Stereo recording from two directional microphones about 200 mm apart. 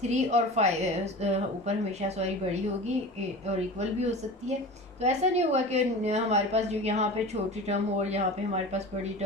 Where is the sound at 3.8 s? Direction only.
35° right (ahead or behind).